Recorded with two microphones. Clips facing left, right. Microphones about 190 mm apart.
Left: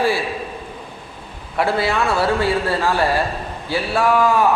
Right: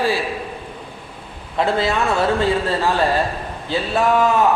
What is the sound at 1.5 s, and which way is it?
A man's voice, 20° right (ahead or behind).